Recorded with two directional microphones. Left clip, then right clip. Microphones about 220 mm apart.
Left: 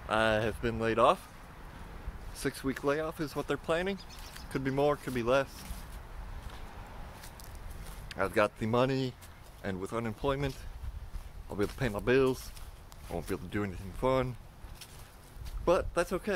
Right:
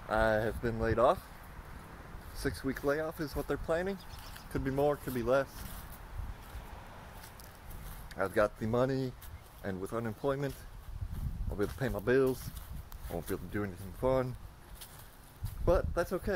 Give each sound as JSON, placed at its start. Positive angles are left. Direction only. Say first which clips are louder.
{"t": 0.1, "sound": "speech", "louder": "left 1 dB", "side_deg": 0}
{"t": 2.3, "sound": "speech", "louder": "left 2 dB", "side_deg": 0}
{"t": 8.1, "sound": "speech", "louder": "left 1 dB", "side_deg": 0}
{"t": 11.5, "sound": "speech", "louder": "left 2 dB", "side_deg": 0}
{"t": 15.6, "sound": "speech", "louder": "left 2 dB", "side_deg": 0}